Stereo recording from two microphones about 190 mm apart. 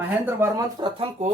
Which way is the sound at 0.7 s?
25° right (ahead or behind).